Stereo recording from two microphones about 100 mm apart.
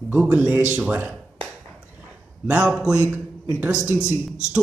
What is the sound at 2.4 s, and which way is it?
Speech, 10° right (ahead or behind).